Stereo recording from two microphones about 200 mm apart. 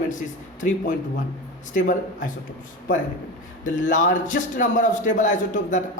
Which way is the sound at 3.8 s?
40° left (ahead or behind).